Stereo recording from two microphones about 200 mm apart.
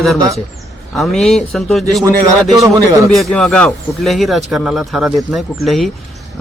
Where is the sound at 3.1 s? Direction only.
5° left (ahead or behind).